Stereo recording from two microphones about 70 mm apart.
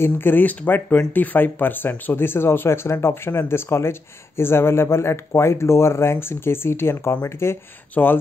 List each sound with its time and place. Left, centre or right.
0.0 s speech: left